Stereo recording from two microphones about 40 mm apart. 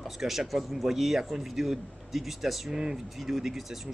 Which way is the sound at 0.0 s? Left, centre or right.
Centre.